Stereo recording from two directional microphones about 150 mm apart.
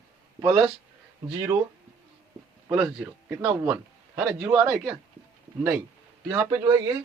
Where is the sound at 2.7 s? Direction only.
10° right (ahead or behind).